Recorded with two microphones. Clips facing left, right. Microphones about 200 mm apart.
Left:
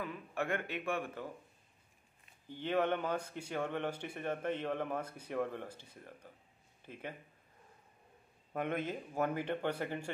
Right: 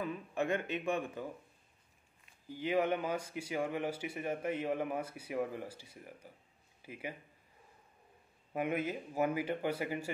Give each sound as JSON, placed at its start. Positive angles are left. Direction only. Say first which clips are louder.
{"t": 0.0, "sound": "a man's voice", "louder": "right 3 dB", "side_deg": -20}
{"t": 2.4, "sound": "speech", "louder": "right 1 dB", "side_deg": -10}
{"t": 8.5, "sound": "speech", "louder": "right 2 dB", "side_deg": -5}